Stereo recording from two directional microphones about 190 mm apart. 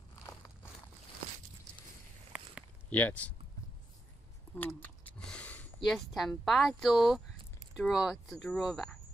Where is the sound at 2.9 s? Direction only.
10° left (ahead or behind).